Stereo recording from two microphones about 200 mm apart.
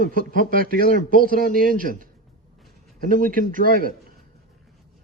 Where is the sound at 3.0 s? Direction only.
45° right (ahead or behind).